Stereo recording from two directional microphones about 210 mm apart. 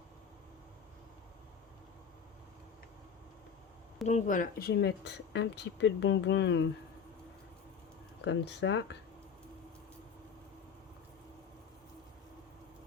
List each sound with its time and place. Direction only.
4.0 s speech: 35° left (ahead or behind); by 6.7 s 55° left (ahead or behind)
8.2 s speech: 55° left (ahead or behind)